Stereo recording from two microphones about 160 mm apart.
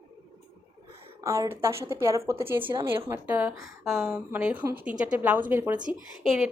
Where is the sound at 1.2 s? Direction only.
20° right (ahead or behind); by 6.5 s centre (ahead or behind).